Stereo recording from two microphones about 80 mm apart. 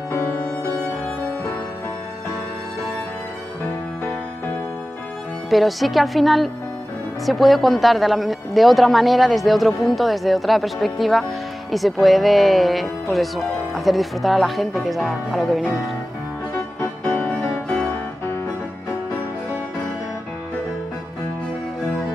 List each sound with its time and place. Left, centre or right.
0.1 s music: left
5.5 s speech: centre